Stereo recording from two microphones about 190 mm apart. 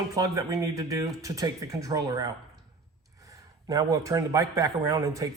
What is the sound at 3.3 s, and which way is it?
A man's voice, 15° right (ahead or behind).